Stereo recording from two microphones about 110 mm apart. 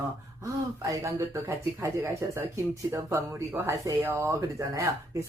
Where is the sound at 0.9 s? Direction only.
25° right (ahead or behind).